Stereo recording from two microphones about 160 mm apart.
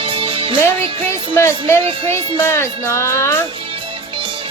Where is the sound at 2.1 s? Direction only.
15° left (ahead or behind).